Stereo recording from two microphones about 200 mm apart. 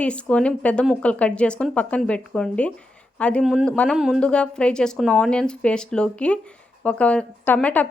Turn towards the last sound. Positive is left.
turn(degrees=5)  # may be behind; listen again after turning